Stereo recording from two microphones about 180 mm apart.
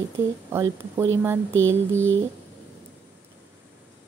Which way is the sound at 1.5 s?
90° right.